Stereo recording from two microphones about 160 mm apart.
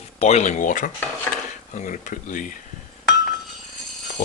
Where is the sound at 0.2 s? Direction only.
45° left (ahead or behind).